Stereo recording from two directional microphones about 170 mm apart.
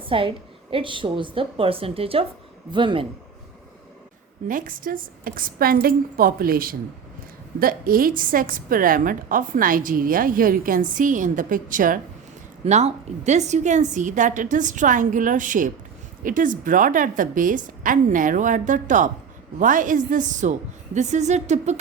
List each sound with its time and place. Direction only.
0.0 s a woman's voice: 30° right (ahead or behind)
4.4 s a woman's voice: 55° right (ahead or behind)
12.6 s a woman's voice: 40° right (ahead or behind)